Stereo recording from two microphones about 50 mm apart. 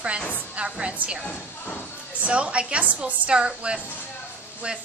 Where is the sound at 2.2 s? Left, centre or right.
Right.